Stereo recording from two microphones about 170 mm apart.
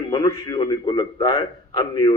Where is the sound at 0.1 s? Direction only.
30° left (ahead or behind).